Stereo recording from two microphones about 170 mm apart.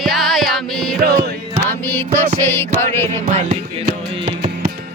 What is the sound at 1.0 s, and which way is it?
Music, 65° right (ahead or behind).